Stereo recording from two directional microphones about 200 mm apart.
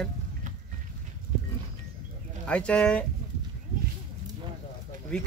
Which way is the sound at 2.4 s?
5° left (ahead or behind).